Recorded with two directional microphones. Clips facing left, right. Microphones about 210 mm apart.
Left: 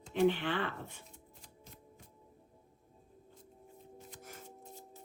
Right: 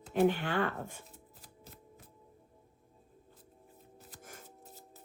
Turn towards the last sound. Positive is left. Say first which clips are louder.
# left 3 dB
turn(degrees=-5)  # may be behind; listen again after turning